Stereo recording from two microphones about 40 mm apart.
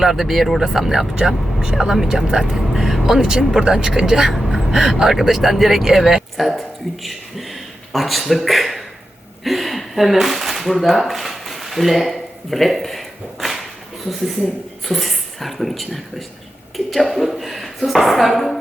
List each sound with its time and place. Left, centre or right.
0.0 s speech: centre
14.8 s speech: centre